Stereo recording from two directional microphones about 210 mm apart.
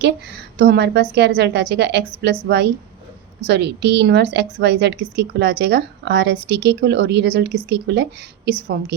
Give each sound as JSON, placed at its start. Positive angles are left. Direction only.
{"t": 0.6, "sound": "a woman's voice", "side_deg": -55}